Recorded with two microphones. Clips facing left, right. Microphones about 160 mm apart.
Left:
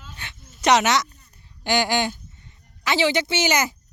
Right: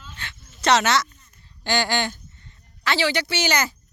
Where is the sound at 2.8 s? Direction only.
20° left (ahead or behind).